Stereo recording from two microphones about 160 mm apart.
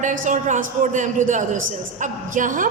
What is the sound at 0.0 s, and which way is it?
A man's voice, 50° right (ahead or behind).